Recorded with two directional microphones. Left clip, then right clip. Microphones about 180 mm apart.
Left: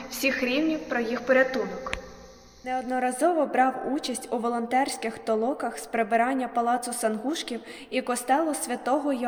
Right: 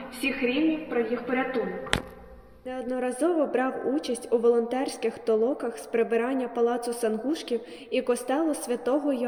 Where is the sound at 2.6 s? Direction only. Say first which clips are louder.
Left 3 dB; 40° left (ahead or behind).